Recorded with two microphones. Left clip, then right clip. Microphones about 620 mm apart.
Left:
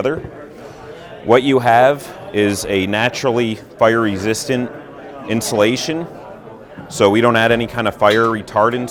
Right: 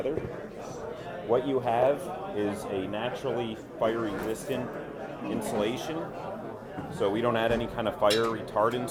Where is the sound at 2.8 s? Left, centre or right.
Left.